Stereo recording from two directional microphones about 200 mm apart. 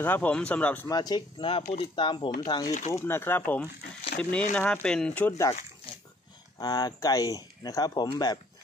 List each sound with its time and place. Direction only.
0.0 s speech: 10° left (ahead or behind)
0.8 s speech: 20° left (ahead or behind)
6.6 s speech: 20° left (ahead or behind)